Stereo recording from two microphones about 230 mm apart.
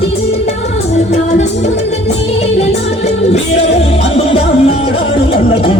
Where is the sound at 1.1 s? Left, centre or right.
Left.